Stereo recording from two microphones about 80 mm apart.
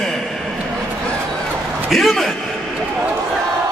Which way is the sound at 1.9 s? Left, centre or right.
Centre.